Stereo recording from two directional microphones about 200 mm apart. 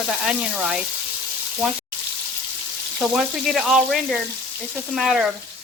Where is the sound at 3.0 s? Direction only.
Centre (ahead or behind).